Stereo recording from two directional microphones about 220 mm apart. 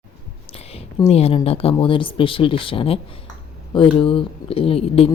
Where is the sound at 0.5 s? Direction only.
25° left (ahead or behind).